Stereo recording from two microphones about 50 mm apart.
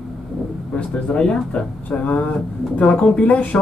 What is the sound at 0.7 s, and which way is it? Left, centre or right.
Speech, centre.